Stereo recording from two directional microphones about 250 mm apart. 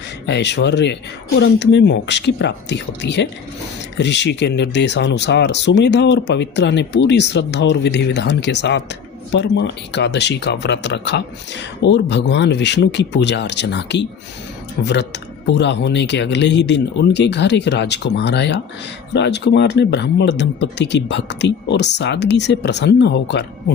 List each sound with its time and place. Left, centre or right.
0.3 s speech: left